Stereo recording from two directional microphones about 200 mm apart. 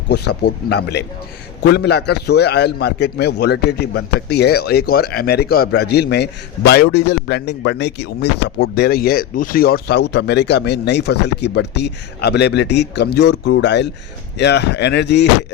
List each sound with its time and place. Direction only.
0.1 s speech: 55° left (ahead or behind)